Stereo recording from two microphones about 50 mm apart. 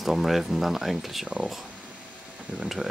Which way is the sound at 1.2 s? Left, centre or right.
Right.